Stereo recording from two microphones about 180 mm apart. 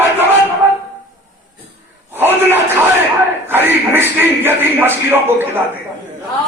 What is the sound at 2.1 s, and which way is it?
A man's voice, 10° right (ahead or behind).